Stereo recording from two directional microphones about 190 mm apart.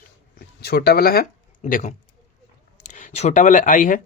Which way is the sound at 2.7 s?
40° left (ahead or behind).